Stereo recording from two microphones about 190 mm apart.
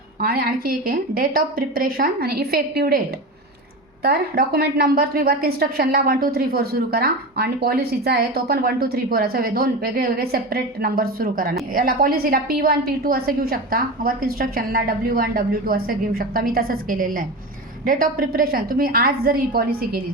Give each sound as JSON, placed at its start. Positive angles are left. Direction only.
{"t": 0.2, "sound": "a woman's voice", "side_deg": -50}
{"t": 4.0, "sound": "a woman's voice", "side_deg": -55}